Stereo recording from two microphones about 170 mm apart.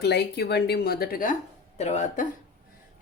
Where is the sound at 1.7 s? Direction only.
40° left (ahead or behind).